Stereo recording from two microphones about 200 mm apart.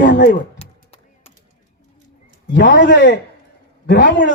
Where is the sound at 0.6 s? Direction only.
30° left (ahead or behind).